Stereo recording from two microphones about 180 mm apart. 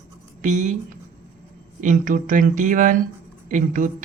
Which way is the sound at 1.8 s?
45° right (ahead or behind).